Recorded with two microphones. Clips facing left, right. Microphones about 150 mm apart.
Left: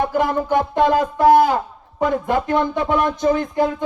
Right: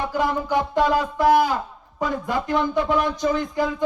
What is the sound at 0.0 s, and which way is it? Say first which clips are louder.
A man's voice: left 4 dB; 50° left (ahead or behind).